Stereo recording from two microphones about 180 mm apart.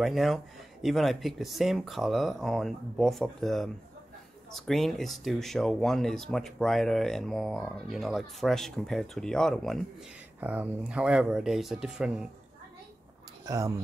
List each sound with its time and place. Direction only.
0.0 s speech: centre (ahead or behind)
10.4 s speech: 10° right (ahead or behind)
13.5 s speech: 20° right (ahead or behind)